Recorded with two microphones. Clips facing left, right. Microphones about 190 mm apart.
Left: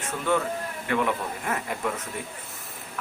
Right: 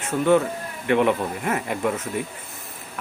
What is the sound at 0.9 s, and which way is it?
Speech, 25° right (ahead or behind).